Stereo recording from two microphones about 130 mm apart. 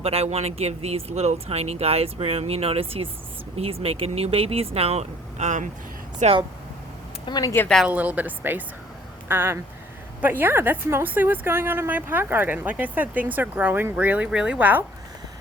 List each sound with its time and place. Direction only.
0.0 s speech: 50° right (ahead or behind)
7.3 s speech: 30° left (ahead or behind)
7.9 s a woman's voice: 10° right (ahead or behind)